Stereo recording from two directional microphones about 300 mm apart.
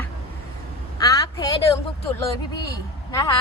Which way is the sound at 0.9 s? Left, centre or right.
Centre.